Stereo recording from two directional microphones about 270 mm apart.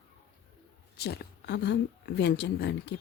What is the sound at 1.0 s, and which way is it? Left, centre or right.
Speech, left.